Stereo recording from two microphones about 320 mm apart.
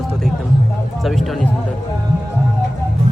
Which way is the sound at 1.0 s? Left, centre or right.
Centre.